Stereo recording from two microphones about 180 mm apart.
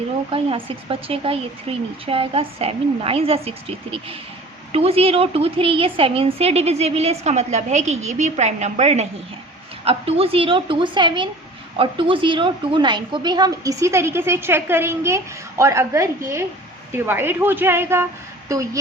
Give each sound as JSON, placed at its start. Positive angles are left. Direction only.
{"t": 0.3, "sound": "a woman's voice", "side_deg": -30}